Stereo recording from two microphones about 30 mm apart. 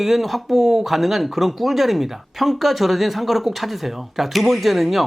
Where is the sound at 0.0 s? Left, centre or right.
Centre.